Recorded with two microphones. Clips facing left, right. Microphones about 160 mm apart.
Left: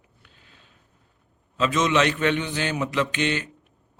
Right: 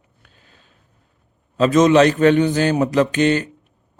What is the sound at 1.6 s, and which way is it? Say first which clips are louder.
A man's voice: right 9 dB; 40° right (ahead or behind).